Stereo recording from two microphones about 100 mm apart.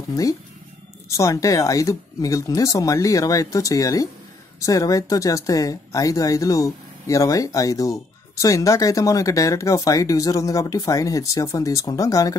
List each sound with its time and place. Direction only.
0.1 s speech: 35° left (ahead or behind)